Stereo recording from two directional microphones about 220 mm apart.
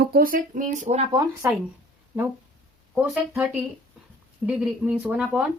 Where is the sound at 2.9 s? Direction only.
5° right (ahead or behind).